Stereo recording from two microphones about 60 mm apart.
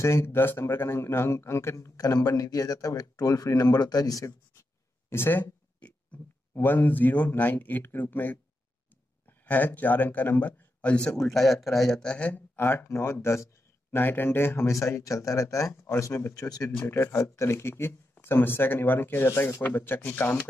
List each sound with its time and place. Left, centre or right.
0.0 s speech: left
2.2 s speech: left
3.7 s speech: left
5.1 s speech: left
5.8 s a sound: left
6.5 s speech: left
9.5 s a man's voice: left
11.1 s speech: centre
12.2 s speech: left
13.9 s speech: left
14.7 s speech: left
16.1 s speech: left
16.3 s speech: left
16.8 s speech: left